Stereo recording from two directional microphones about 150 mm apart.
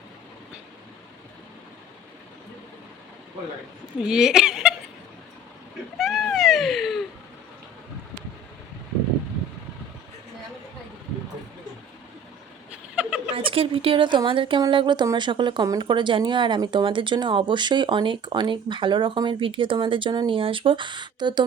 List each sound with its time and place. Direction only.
4.0 s speech: 5° right (ahead or behind)
6.0 s cat: centre (ahead or behind)
13.0 s a sound: 5° right (ahead or behind)
13.3 s a woman's voice: 35° right (ahead or behind)